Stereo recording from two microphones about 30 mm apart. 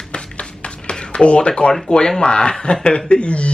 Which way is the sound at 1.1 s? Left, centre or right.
Left.